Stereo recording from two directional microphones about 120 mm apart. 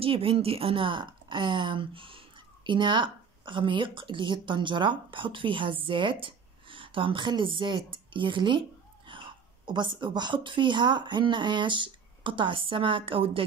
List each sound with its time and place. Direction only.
0.0 s a woman's voice: 50° right (ahead or behind)